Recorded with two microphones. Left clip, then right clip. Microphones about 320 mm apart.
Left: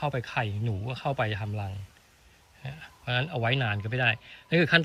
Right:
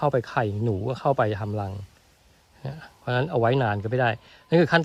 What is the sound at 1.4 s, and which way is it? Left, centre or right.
Speech, right.